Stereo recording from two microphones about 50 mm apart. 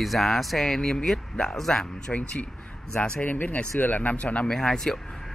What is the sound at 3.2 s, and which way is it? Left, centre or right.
Speech, left.